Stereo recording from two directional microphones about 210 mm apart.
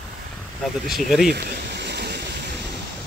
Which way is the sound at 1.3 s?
50° right (ahead or behind).